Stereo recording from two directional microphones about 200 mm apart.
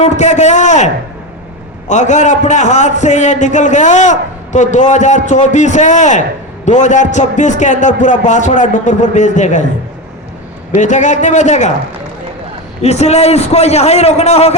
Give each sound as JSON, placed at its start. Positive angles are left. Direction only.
{"t": 0.0, "sound": "a man's voice", "side_deg": 35}
{"t": 1.9, "sound": "a man's voice", "side_deg": 35}
{"t": 10.8, "sound": "a man's voice", "side_deg": 35}
{"t": 12.8, "sound": "a man's voice", "side_deg": 35}